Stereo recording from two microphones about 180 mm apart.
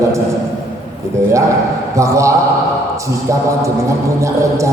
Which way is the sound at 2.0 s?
15° right (ahead or behind).